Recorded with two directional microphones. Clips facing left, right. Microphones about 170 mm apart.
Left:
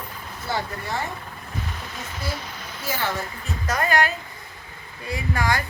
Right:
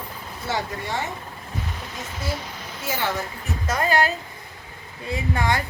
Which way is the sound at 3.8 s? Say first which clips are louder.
Right 1 dB; 30° right (ahead or behind).